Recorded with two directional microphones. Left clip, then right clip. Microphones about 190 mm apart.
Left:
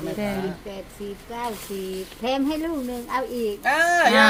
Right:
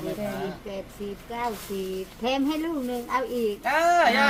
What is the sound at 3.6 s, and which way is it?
Speech, 65° left (ahead or behind).